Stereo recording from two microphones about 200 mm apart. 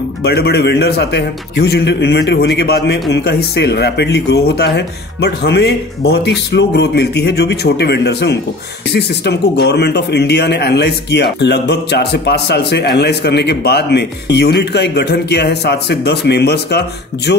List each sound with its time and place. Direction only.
0.2 s a man's voice: 55° left (ahead or behind)